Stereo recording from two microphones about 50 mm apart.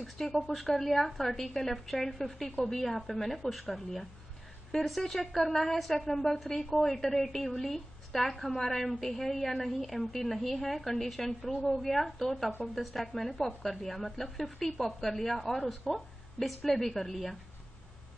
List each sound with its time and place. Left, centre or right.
0.0 s a woman's voice: centre